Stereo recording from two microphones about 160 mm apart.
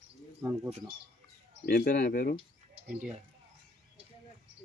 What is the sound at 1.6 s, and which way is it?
Speech, 70° left (ahead or behind).